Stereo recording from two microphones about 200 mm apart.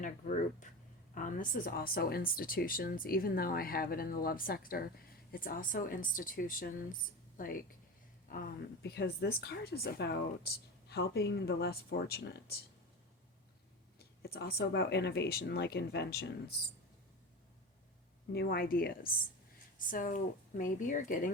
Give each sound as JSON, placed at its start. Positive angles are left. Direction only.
{"t": 0.0, "sound": "speech", "side_deg": 40}
{"t": 14.0, "sound": "speech", "side_deg": 50}
{"t": 18.3, "sound": "speech", "side_deg": 50}